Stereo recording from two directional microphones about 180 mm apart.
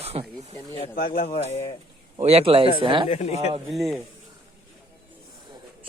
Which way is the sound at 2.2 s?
35° right (ahead or behind).